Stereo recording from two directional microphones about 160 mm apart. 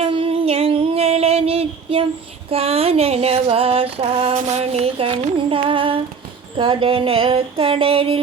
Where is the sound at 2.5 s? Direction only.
40° right (ahead or behind).